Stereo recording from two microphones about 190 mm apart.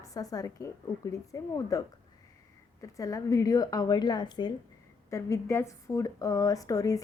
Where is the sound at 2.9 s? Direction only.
15° left (ahead or behind).